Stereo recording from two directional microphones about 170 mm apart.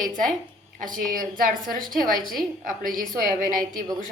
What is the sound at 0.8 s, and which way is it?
Speech, 55° right (ahead or behind).